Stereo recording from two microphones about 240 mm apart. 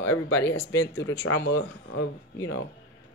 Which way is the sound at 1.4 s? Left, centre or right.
Left.